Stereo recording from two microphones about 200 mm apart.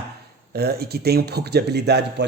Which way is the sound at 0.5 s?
50° right (ahead or behind).